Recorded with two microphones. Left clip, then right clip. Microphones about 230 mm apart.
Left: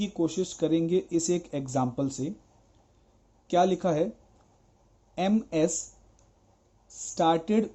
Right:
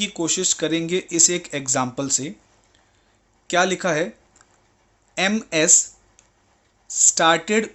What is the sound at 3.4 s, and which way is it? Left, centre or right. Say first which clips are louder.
Speech: right 4 dB; centre.